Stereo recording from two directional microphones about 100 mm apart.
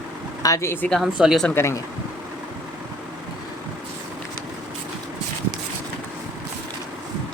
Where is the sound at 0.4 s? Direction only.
30° left (ahead or behind).